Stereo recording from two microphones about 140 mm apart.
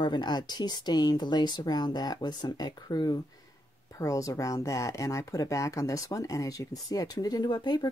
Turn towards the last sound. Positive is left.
turn(degrees=30)  # may be behind; listen again after turning